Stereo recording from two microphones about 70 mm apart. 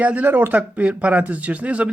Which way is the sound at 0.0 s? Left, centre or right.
Right.